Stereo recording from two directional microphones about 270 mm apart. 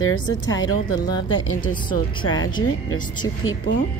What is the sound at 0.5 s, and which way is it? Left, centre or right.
Speech, centre.